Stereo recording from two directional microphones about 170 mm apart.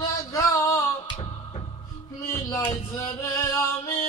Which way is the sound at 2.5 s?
15° left (ahead or behind).